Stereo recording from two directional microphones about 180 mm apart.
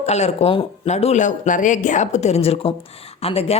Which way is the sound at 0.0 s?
35° left (ahead or behind).